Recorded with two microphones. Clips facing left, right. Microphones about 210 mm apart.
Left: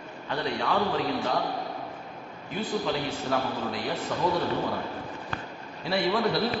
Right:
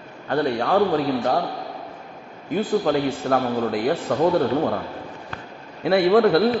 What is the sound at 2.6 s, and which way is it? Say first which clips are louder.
A man's voice: right 8 dB; 55° right (ahead or behind).